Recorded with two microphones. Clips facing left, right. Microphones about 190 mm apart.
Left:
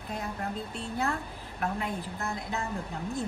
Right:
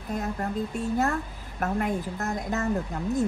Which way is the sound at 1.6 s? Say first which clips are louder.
Right 5 dB; 45° right (ahead or behind).